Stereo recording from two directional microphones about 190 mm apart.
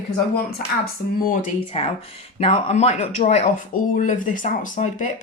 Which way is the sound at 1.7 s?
35° left (ahead or behind).